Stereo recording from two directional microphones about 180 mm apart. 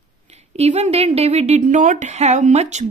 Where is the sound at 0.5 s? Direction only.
35° right (ahead or behind).